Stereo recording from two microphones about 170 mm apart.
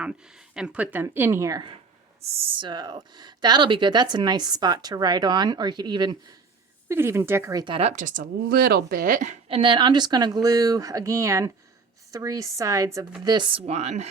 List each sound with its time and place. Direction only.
0.0 s speech: 5° right (ahead or behind); by 1.7 s 20° right (ahead or behind)
2.2 s speech: 35° right (ahead or behind)
6.8 s speech: 15° right (ahead or behind)
7.6 s speech: 35° right (ahead or behind)